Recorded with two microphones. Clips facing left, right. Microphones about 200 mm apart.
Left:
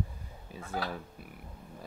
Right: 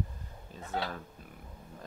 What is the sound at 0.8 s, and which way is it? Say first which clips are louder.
Speech: left 1 dB; 25° right (ahead or behind).